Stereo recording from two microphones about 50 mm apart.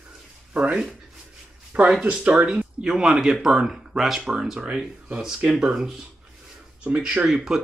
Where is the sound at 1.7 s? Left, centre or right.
Right; by 4.2 s centre.